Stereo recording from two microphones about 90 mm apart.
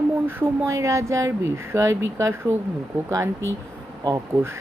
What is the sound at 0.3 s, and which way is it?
Speech, 25° right (ahead or behind).